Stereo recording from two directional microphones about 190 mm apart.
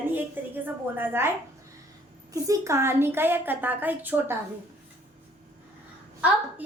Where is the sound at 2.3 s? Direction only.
15° right (ahead or behind).